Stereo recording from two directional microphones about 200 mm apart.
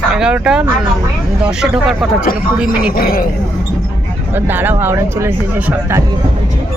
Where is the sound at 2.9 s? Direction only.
45° left (ahead or behind).